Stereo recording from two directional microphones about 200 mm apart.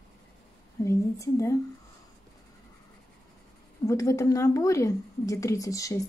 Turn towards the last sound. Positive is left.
turn(degrees=15)  # may be behind; listen again after turning